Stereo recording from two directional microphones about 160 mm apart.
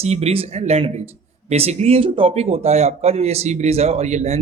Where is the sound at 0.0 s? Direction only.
40° right (ahead or behind).